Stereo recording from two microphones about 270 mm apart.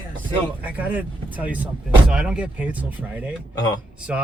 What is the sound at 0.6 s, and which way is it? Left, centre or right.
Speech, centre.